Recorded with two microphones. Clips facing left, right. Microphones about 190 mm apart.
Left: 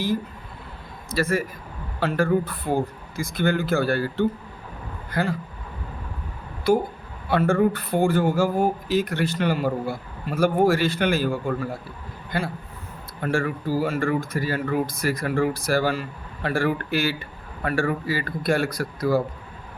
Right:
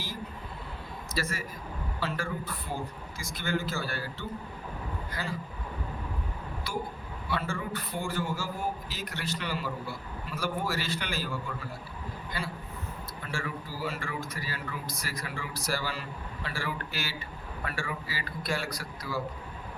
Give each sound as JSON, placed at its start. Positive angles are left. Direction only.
{"t": 1.1, "sound": "speech", "side_deg": 60}
{"t": 6.7, "sound": "a man's voice", "side_deg": 55}